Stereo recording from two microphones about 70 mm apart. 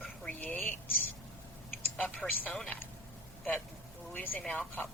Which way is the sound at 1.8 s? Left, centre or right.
Left.